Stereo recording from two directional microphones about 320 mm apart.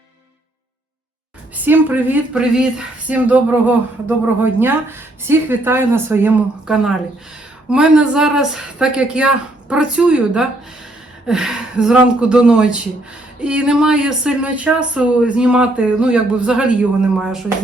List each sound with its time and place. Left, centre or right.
1.5 s speech: centre